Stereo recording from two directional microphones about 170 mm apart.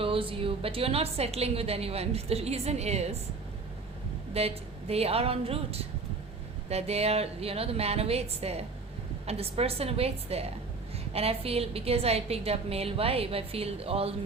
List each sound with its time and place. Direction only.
0.0 s a woman's voice: 30° right (ahead or behind)
4.4 s a woman's voice: 35° right (ahead or behind)